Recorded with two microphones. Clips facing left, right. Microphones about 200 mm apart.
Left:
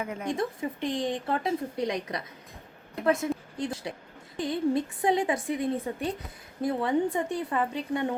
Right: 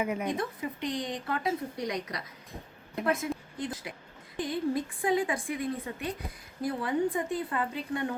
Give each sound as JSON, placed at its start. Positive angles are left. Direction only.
{"t": 0.0, "sound": "speech", "side_deg": -15}
{"t": 0.9, "sound": "a woman's voice", "side_deg": 25}